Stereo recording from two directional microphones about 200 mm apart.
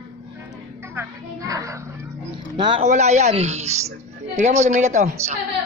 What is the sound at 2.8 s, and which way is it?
A man's voice, 35° right (ahead or behind).